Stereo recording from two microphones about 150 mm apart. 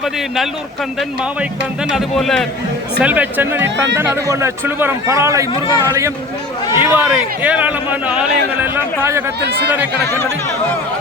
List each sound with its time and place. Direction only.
0.9 s a man's voice: 5° right (ahead or behind)
3.0 s speech: 10° right (ahead or behind)
6.7 s speech: 10° right (ahead or behind)